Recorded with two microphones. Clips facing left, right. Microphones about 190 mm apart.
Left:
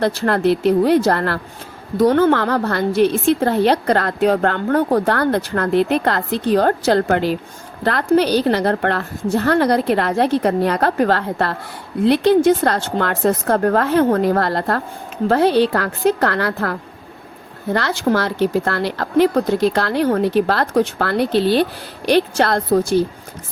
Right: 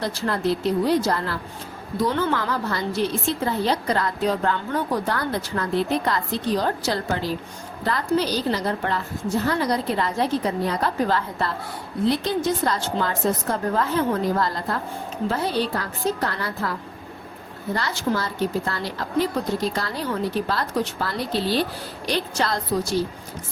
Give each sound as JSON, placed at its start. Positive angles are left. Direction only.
{"t": 0.0, "sound": "a woman's voice", "side_deg": 65}
{"t": 2.0, "sound": "a woman's voice", "side_deg": 50}
{"t": 18.1, "sound": "a woman's voice", "side_deg": 75}